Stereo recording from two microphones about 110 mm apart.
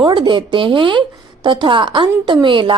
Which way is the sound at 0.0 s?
45° right (ahead or behind).